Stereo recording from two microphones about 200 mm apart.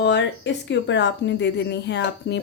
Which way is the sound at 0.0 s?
60° left (ahead or behind).